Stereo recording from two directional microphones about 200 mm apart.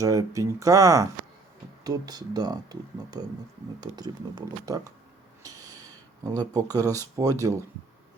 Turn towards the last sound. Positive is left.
turn(degrees=-15)  # may be behind; listen again after turning